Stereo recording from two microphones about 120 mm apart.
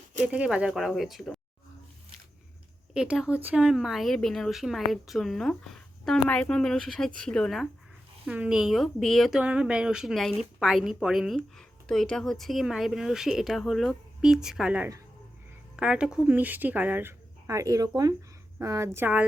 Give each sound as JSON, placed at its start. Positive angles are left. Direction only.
{"t": 0.3, "sound": "a woman's voice", "side_deg": -10}
{"t": 2.9, "sound": "a woman's voice", "side_deg": -5}
{"t": 8.3, "sound": "a woman's voice", "side_deg": -10}
{"t": 9.4, "sound": "a woman's voice", "side_deg": -10}
{"t": 18.9, "sound": "speech", "side_deg": -15}